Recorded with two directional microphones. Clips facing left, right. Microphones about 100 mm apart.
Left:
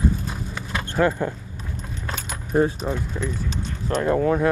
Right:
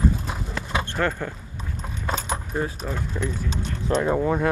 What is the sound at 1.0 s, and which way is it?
Speech, 15° left (ahead or behind).